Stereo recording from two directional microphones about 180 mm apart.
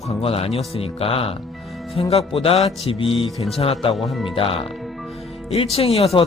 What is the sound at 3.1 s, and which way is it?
Speech, centre (ahead or behind).